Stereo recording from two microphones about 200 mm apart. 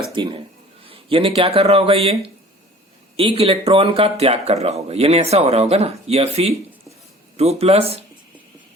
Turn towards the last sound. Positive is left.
turn(degrees=-30)  # may be behind; listen again after turning